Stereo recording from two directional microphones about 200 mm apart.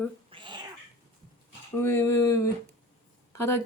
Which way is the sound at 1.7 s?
10° left (ahead or behind).